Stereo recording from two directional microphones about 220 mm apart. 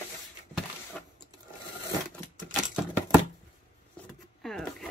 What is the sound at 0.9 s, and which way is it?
Sewing machine, 5° left (ahead or behind).